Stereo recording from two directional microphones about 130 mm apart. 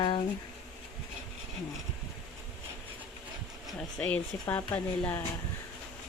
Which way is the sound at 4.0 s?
10° left (ahead or behind).